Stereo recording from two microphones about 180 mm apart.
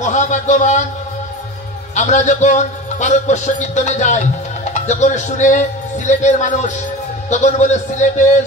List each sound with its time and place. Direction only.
0.0 s a man's voice: 40° left (ahead or behind)
2.0 s a man's voice: 40° left (ahead or behind)